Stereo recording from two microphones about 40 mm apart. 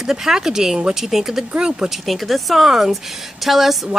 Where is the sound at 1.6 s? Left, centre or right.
Centre.